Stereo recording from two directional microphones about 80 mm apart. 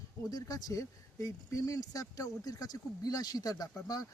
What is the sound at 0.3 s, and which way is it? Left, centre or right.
Speech, left.